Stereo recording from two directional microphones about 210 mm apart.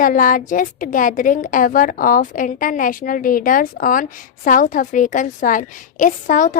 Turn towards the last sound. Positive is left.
turn(degrees=35)  # may be behind; listen again after turning